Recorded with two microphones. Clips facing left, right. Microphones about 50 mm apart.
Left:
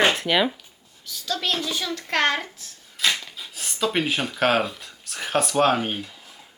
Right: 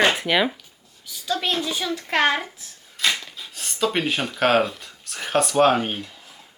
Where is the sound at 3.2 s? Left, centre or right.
Centre.